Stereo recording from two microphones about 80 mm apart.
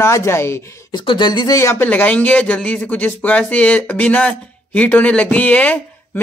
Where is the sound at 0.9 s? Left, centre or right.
Left.